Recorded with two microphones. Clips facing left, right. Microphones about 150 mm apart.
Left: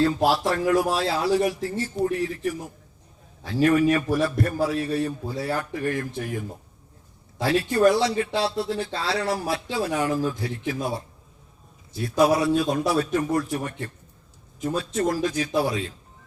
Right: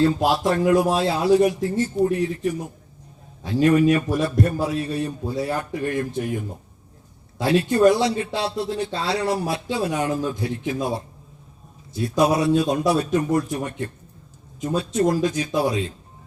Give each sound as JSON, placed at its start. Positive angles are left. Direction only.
{"t": 0.0, "sound": "speech", "side_deg": -20}
{"t": 7.4, "sound": "speech", "side_deg": -20}
{"t": 11.9, "sound": "speech", "side_deg": -20}